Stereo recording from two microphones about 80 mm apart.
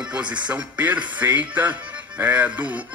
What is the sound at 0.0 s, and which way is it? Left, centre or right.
Speech, centre.